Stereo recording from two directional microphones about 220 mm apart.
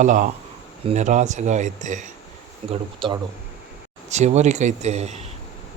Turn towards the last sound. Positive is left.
turn(degrees=-30)  # may be behind; listen again after turning